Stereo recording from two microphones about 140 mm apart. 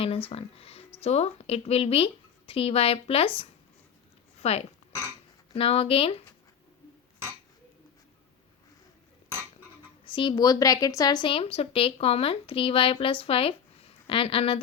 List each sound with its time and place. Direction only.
0.0 s speech: 45° left (ahead or behind)
4.4 s dog: 45° left (ahead or behind)
5.5 s speech: 45° left (ahead or behind)
10.1 s a woman's voice: 35° left (ahead or behind)